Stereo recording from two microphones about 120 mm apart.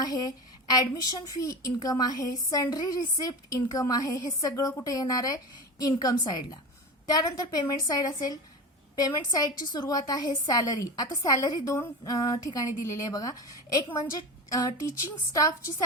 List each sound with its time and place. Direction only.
0.0 s a woman's voice: 35° left (ahead or behind)
15.3 s a woman's voice: 25° left (ahead or behind)